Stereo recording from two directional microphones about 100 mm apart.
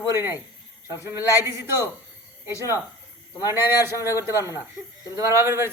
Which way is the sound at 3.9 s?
30° left (ahead or behind).